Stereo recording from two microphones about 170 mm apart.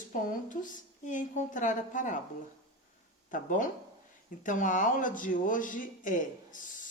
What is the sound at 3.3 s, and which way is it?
Speech, 50° left (ahead or behind).